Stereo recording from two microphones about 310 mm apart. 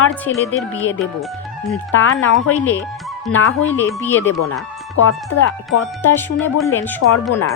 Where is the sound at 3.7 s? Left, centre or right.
Centre.